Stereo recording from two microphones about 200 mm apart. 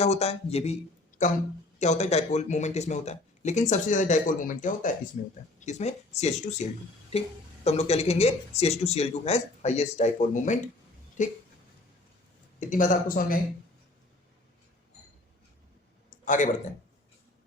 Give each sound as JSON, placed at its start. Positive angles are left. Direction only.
{"t": 0.0, "sound": "speech", "side_deg": 30}
{"t": 12.5, "sound": "speech", "side_deg": 40}
{"t": 16.0, "sound": "a sound", "side_deg": 40}